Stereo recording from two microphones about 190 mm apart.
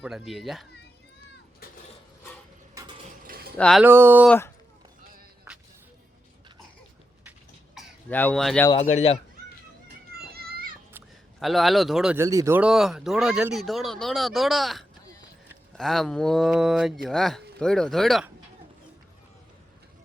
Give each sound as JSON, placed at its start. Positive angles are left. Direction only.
{"t": 0.0, "sound": "speech", "side_deg": 0}
{"t": 3.2, "sound": "a sound", "side_deg": -50}
{"t": 3.6, "sound": "speech", "side_deg": 0}
{"t": 3.8, "sound": "speech", "side_deg": -10}
{"t": 4.3, "sound": "speech", "side_deg": 15}
{"t": 5.5, "sound": "music", "side_deg": -15}
{"t": 8.1, "sound": "speech", "side_deg": 10}
{"t": 8.7, "sound": "speech", "side_deg": 35}
{"t": 10.3, "sound": "children playing", "side_deg": -50}
{"t": 11.3, "sound": "speech", "side_deg": 0}
{"t": 12.1, "sound": "speech", "side_deg": -15}